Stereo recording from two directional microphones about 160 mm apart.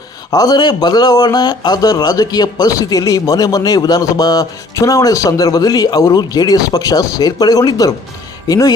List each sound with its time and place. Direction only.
0.3 s speech: 25° left (ahead or behind)